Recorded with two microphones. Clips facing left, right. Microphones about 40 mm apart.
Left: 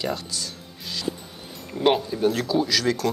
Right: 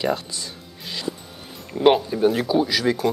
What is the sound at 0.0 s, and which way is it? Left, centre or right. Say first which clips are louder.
Music: right 4 dB; centre.